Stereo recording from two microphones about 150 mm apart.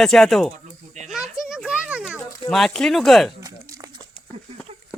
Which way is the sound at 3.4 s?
25° right (ahead or behind).